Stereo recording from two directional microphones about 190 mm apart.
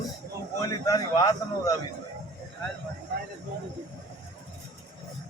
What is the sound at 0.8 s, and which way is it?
Speech, 15° left (ahead or behind).